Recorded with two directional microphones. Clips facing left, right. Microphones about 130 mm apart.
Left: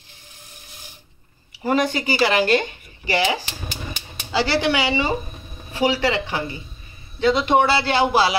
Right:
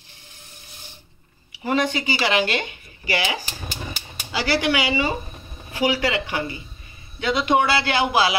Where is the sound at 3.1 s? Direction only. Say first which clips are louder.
Left 4 dB; 30° left (ahead or behind).